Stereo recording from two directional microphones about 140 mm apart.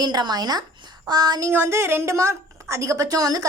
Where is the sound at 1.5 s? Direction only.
20° right (ahead or behind).